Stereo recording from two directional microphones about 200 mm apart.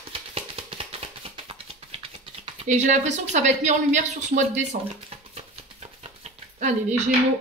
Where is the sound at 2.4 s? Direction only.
35° right (ahead or behind).